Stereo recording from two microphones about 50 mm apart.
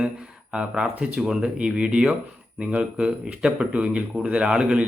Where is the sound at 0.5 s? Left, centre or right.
Centre.